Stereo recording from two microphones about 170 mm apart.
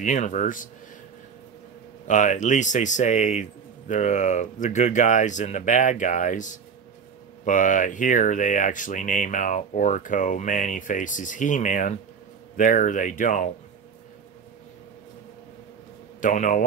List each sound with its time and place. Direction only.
0.0 s speech: 45° left (ahead or behind)
2.0 s speech: 45° left (ahead or behind)
16.2 s speech: 50° left (ahead or behind)